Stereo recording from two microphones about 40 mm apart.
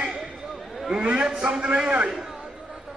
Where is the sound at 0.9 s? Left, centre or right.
Right.